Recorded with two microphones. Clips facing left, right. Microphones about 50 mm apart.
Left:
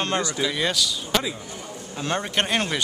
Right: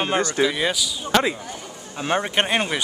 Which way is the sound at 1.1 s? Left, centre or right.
Right.